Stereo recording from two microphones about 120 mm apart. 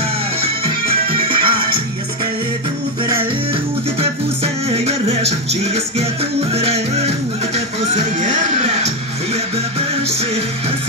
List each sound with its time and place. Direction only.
0.4 s music: 50° right (ahead or behind)
4.0 s music: 55° right (ahead or behind)
7.5 s speech: 85° right; by 10.4 s 60° right (ahead or behind)